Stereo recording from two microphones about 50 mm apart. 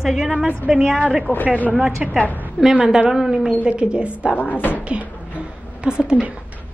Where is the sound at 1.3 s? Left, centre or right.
Right.